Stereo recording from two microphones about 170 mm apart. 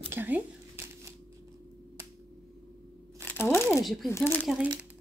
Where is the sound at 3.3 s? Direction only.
10° left (ahead or behind).